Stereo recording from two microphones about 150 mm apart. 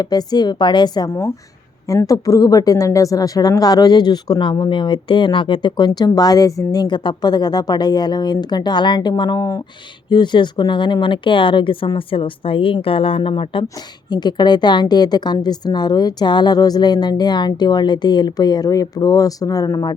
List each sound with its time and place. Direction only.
0.0 s a woman's voice: 25° left (ahead or behind)